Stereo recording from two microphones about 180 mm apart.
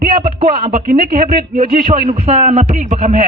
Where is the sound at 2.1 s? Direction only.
35° right (ahead or behind).